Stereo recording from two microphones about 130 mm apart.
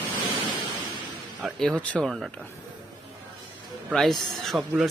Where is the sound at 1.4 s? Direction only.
Centre (ahead or behind).